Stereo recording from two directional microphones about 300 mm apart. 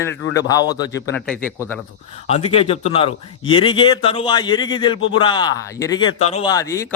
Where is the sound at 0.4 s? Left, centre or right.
Centre.